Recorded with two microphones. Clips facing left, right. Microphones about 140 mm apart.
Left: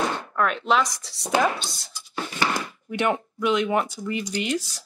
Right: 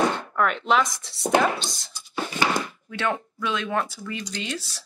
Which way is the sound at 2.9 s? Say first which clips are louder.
Left 4 dB; 15° left (ahead or behind).